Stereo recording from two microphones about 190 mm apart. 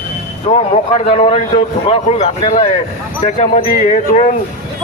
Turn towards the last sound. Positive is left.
turn(degrees=35)  # may be behind; listen again after turning